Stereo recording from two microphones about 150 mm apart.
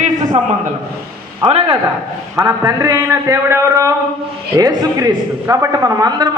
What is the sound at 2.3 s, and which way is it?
A man's voice, 20° right (ahead or behind).